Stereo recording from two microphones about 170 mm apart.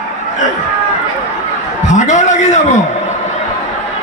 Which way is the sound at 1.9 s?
45° left (ahead or behind).